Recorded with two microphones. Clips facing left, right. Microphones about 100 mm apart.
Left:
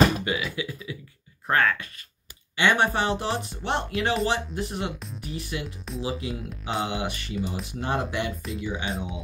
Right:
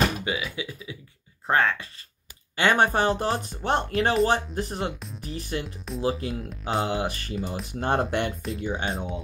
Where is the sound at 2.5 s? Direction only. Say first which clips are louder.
Right 1 dB; 40° right (ahead or behind).